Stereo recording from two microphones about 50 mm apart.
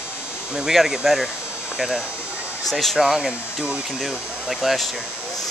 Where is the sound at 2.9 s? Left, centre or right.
Centre.